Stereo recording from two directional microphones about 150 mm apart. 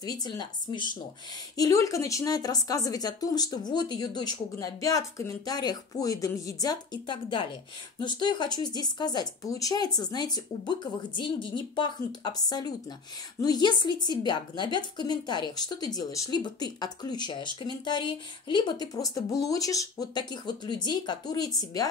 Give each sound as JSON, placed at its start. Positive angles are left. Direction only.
{"t": 0.0, "sound": "speech", "side_deg": 30}